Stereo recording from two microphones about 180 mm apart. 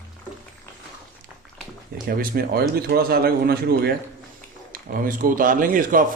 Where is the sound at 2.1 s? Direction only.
55° right (ahead or behind).